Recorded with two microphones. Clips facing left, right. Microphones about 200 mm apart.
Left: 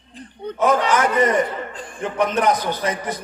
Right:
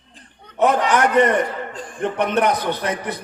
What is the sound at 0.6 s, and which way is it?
A man's voice, 65° right (ahead or behind).